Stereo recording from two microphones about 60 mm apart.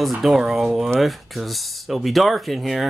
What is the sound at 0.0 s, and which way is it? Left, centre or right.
Speech, centre.